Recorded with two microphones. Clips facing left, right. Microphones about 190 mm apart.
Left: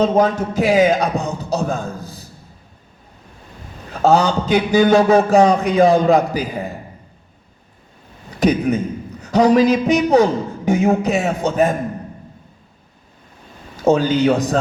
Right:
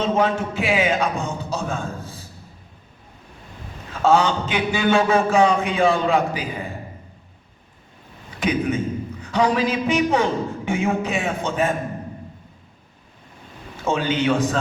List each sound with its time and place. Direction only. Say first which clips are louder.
0.0 s a man's voice: left 5 dB; 40° left (ahead or behind)
3.9 s a man's voice: left 3 dB; 40° left (ahead or behind)
8.3 s a man's voice: left 6 dB; 40° left (ahead or behind)
13.7 s a man's voice: left 7 dB; 40° left (ahead or behind)